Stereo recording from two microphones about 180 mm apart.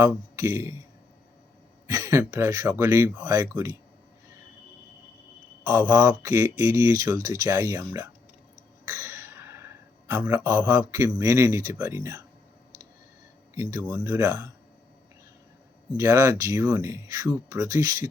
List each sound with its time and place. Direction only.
0.0 s speech: 15° right (ahead or behind)
1.9 s speech: 15° right (ahead or behind)
5.6 s speech: 15° right (ahead or behind)
13.5 s speech: 15° right (ahead or behind)
16.0 s speech: 15° right (ahead or behind)